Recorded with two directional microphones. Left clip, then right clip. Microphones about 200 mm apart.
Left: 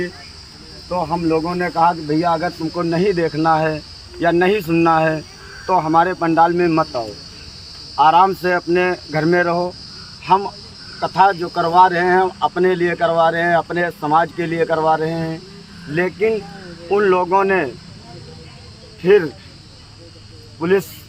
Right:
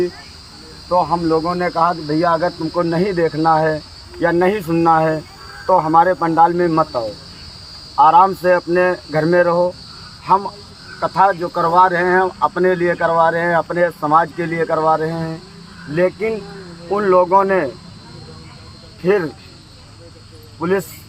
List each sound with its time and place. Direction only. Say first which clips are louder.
0.9 s speech: right 5 dB; 25° left (ahead or behind)
1.2 s speech: right 2 dB; 10° left (ahead or behind)
19.0 s speech: left 3 dB; centre (ahead or behind)
20.6 s speech: left 2 dB; 5° left (ahead or behind)